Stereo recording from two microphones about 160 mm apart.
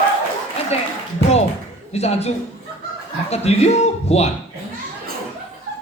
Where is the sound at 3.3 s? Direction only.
40° left (ahead or behind).